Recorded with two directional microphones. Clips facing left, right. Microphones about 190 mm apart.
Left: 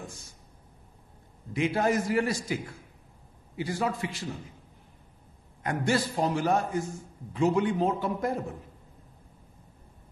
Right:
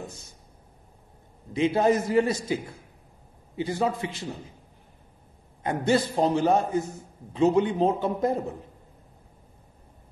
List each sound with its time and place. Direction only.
1.5 s a man's voice: 20° right (ahead or behind)
5.6 s a man's voice: 25° right (ahead or behind)